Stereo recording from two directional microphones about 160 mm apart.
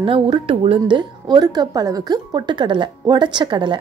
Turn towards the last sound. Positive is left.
turn(degrees=-30)  # may be behind; listen again after turning